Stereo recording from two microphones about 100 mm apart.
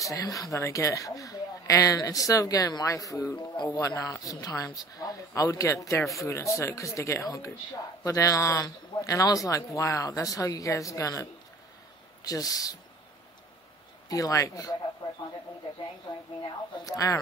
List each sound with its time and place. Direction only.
0.0 s speech: 35° left (ahead or behind)
14.0 s speech: 35° left (ahead or behind)
16.1 s a sound: 45° left (ahead or behind)
16.8 s speech: 35° left (ahead or behind)